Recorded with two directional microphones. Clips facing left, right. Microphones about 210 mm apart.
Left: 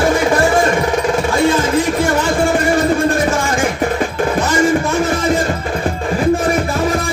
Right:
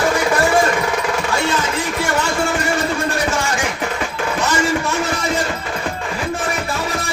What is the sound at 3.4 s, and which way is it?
Music, 50° left (ahead or behind).